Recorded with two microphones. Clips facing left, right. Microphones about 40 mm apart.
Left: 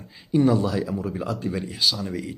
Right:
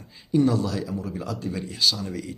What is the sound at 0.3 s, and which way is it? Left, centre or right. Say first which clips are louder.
A man's voice: left 2 dB; centre.